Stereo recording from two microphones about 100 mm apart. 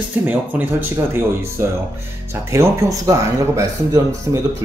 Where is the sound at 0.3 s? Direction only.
20° right (ahead or behind).